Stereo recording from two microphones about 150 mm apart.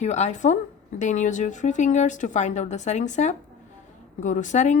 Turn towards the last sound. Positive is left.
turn(degrees=55)  # may be behind; listen again after turning